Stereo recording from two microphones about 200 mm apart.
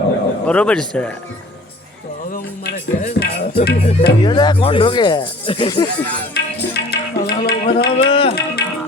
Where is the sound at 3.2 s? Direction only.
55° left (ahead or behind).